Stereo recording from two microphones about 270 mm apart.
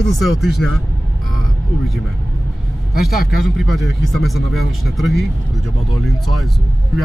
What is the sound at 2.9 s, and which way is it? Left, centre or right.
Speech, left.